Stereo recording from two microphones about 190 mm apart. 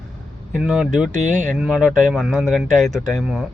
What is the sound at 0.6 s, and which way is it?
Speech, 5° right (ahead or behind).